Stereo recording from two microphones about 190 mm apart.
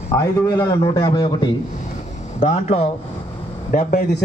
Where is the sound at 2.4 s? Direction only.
35° left (ahead or behind).